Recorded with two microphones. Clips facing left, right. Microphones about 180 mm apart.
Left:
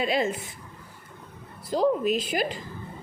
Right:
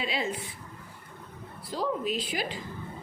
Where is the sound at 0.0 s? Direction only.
45° left (ahead or behind).